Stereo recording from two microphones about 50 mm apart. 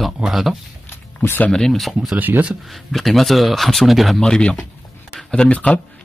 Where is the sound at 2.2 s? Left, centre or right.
Right.